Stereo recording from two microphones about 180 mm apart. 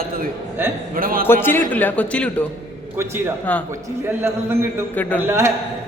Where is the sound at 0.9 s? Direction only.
55° right (ahead or behind).